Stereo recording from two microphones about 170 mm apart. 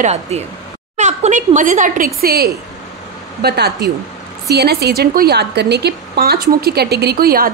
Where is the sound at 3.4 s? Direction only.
75° right (ahead or behind).